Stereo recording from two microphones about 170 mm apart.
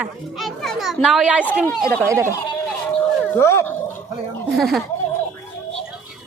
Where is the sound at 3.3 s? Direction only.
15° left (ahead or behind).